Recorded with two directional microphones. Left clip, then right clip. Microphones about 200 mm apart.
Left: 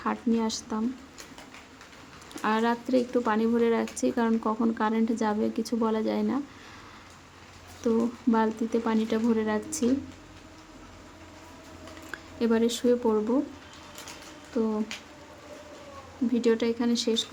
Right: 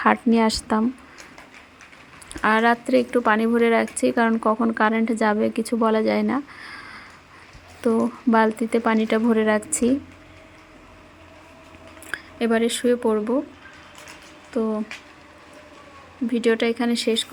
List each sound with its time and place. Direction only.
0.0 s a woman's voice: 30° right (ahead or behind)
2.4 s speech: 20° right (ahead or behind)
12.1 s speech: 20° right (ahead or behind)
14.5 s speech: 25° right (ahead or behind)
16.3 s speech: 20° right (ahead or behind)